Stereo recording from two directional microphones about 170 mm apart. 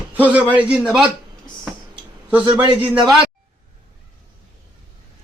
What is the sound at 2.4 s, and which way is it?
Speech, 25° right (ahead or behind).